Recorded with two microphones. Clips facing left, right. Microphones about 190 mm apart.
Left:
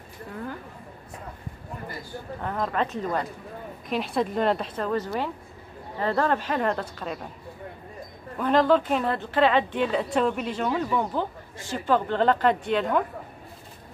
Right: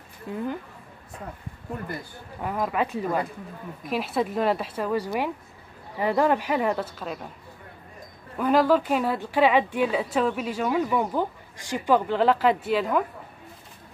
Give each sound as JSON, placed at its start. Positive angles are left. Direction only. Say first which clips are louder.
{"t": 0.3, "sound": "speech", "louder": "right 6 dB", "side_deg": -20}
{"t": 2.4, "sound": "a woman's voice", "louder": "right 1 dB", "side_deg": -10}
{"t": 8.4, "sound": "speech", "louder": "even", "side_deg": -10}